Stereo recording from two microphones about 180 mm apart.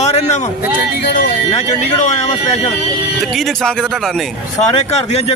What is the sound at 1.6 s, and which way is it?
Speech, 40° left (ahead or behind).